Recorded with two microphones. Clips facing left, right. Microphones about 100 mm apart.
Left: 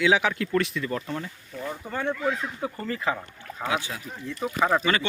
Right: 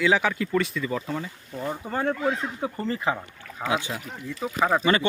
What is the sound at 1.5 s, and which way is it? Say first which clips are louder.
Speech: right 3 dB; 30° right (ahead or behind).